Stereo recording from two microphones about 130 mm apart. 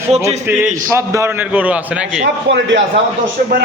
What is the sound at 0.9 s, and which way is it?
A man's voice, 20° right (ahead or behind).